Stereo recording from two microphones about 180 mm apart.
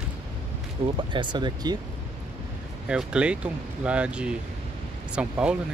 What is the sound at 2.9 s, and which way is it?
Speech, 5° right (ahead or behind).